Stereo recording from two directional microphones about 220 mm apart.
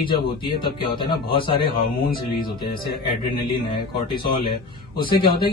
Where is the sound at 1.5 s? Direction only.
40° left (ahead or behind).